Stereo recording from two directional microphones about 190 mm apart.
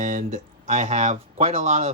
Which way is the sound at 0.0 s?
40° right (ahead or behind).